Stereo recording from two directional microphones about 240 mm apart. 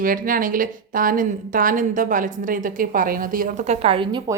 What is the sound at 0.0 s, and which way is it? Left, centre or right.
Speech, right.